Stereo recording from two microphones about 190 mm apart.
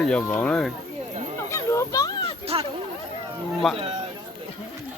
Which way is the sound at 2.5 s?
25° right (ahead or behind).